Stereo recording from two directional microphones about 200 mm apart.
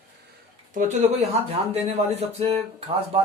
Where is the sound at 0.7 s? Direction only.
40° right (ahead or behind).